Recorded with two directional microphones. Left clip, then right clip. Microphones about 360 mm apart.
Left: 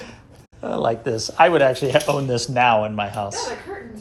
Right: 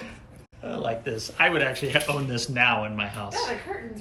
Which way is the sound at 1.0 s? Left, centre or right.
Centre.